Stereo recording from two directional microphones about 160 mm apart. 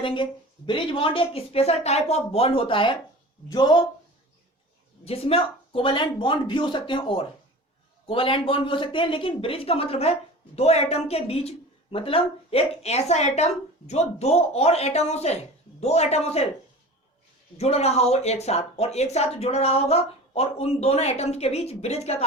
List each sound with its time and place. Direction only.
0.0 s speech: 30° left (ahead or behind)
5.0 s a man's voice: 35° left (ahead or behind)
17.6 s speech: 40° left (ahead or behind)